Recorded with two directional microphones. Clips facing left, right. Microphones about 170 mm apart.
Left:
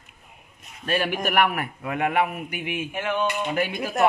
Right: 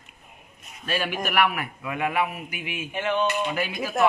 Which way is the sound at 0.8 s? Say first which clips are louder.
Left 3 dB; 50° left (ahead or behind).